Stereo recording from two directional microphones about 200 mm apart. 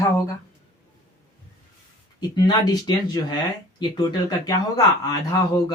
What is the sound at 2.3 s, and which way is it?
Speech, 20° left (ahead or behind).